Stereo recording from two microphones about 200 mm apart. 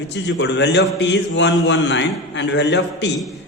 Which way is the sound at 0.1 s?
60° left (ahead or behind).